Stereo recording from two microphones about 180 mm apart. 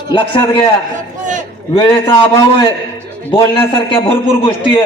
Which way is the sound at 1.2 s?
45° right (ahead or behind).